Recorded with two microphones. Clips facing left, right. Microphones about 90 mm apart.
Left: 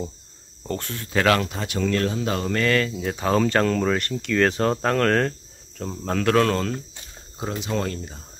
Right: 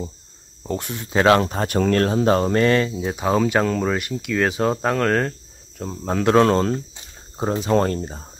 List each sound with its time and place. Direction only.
0.7 s speech: 15° right (ahead or behind)
1.5 s speech: 45° right (ahead or behind); by 2.9 s 30° right (ahead or behind)
3.0 s speech: 10° right (ahead or behind)
6.1 s speech: 25° right (ahead or behind)